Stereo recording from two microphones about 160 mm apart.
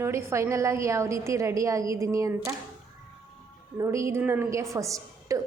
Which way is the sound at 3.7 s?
20° right (ahead or behind).